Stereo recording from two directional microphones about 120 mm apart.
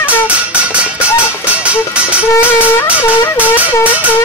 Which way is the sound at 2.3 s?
20° left (ahead or behind).